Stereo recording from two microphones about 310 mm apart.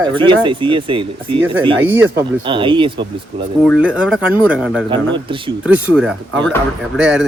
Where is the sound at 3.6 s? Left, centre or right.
Centre.